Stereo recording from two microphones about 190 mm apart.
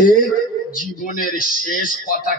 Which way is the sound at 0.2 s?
45° left (ahead or behind).